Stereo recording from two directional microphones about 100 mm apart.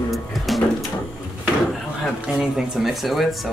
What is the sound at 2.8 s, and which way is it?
Speech, centre (ahead or behind).